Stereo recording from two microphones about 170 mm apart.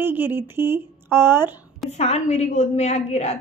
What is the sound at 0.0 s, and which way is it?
A woman's voice, 10° right (ahead or behind).